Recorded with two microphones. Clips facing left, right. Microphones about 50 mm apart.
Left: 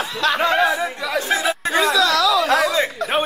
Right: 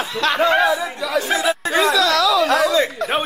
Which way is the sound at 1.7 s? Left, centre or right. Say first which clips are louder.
Even; centre.